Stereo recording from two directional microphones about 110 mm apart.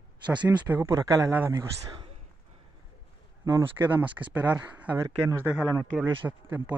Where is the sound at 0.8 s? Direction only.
30° right (ahead or behind).